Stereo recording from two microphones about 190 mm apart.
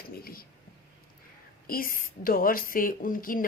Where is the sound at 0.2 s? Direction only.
50° left (ahead or behind).